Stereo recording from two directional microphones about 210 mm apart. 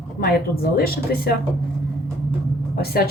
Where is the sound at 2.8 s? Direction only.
45° left (ahead or behind).